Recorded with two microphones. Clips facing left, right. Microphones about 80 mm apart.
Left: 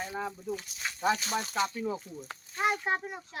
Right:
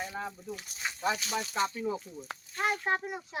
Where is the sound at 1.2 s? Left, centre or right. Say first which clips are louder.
Left 1 dB; left.